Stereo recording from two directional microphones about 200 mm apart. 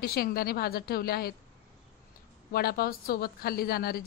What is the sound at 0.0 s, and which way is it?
A woman's voice, 50° left (ahead or behind).